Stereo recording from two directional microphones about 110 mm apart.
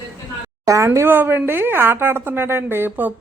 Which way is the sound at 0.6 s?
30° right (ahead or behind).